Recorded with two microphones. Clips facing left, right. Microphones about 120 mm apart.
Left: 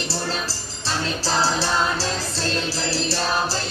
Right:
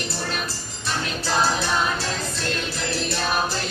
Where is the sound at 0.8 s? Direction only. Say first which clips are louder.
Left 2 dB; 30° left (ahead or behind).